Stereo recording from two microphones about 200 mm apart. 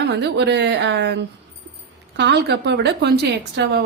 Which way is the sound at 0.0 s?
60° right (ahead or behind).